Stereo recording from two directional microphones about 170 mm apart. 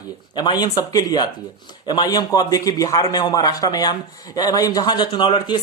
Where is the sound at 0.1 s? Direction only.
25° left (ahead or behind).